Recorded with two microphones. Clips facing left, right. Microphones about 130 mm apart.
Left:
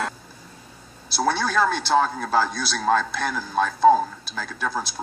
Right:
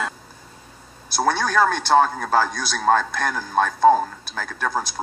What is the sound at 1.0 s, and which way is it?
A man's voice, 50° right (ahead or behind).